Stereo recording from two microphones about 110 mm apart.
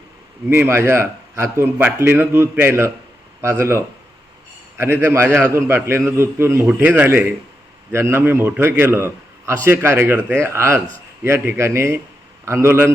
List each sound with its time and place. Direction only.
0.4 s a man's voice: 20° right (ahead or behind)
6.7 s a man's voice: 10° right (ahead or behind)